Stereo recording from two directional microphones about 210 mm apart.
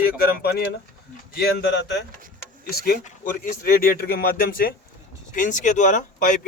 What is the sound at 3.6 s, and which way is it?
Speech, 45° left (ahead or behind).